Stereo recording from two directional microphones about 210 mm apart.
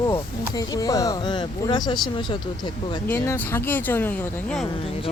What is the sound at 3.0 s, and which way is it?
Speech, 10° left (ahead or behind).